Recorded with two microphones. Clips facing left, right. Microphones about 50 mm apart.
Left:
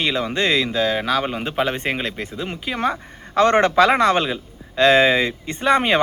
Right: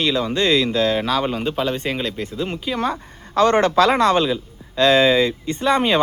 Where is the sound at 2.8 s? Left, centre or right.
Left.